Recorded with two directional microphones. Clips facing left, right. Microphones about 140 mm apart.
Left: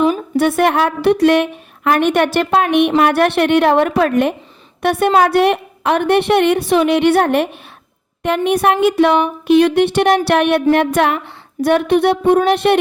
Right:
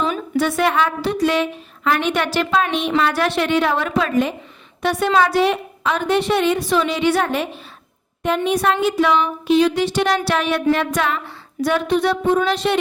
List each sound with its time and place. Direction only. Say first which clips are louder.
0.3 s a woman's voice: left 3 dB; 55° left (ahead or behind)